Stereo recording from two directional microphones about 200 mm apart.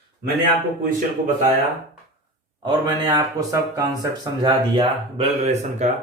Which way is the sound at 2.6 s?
20° right (ahead or behind).